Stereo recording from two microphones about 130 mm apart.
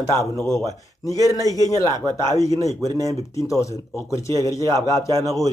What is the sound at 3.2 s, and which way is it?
Speech, 25° left (ahead or behind).